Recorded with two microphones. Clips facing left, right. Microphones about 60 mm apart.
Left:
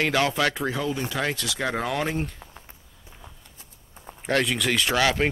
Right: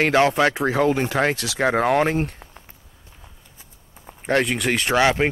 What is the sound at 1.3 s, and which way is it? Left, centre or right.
Speech, right.